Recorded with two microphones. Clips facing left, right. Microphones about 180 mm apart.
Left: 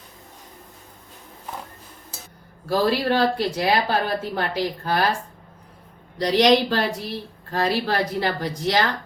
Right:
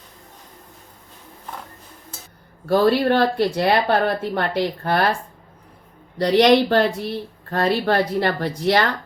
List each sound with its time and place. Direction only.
2.6 s speech: 60° right (ahead or behind)
6.1 s speech: 60° right (ahead or behind)